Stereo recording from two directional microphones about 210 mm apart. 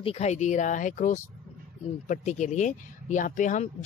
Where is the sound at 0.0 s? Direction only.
30° left (ahead or behind).